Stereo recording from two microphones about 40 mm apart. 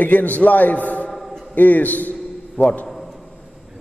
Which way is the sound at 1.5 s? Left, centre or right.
Left.